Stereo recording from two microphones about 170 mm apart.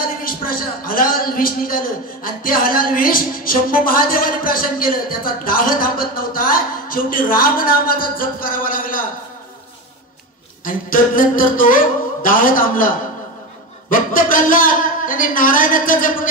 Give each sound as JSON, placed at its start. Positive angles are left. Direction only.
{"t": 0.0, "sound": "speech", "side_deg": 55}
{"t": 10.6, "sound": "speech", "side_deg": 55}